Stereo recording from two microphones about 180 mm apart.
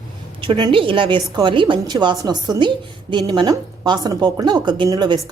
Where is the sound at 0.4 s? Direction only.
25° right (ahead or behind).